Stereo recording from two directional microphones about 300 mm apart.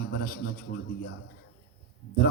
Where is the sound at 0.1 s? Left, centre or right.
Left.